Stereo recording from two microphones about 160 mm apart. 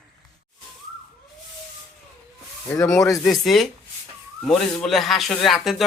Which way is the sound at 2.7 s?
20° left (ahead or behind).